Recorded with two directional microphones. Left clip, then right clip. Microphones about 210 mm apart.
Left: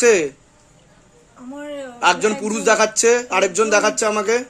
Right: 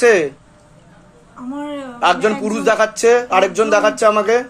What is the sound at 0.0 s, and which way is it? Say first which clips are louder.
Speech: right 2 dB; 40° left (ahead or behind).